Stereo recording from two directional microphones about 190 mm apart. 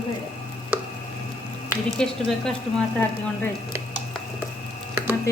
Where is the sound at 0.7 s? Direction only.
10° right (ahead or behind).